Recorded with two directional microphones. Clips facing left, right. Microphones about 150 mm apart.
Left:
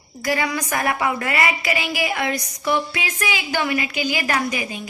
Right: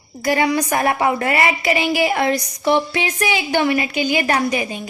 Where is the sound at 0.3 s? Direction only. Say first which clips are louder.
Right 5 dB; 30° right (ahead or behind).